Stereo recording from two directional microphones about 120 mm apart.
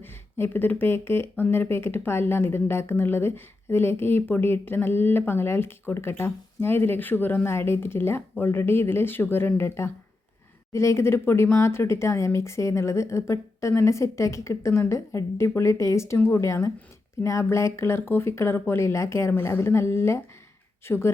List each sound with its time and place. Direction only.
0.0 s speech: 20° left (ahead or behind)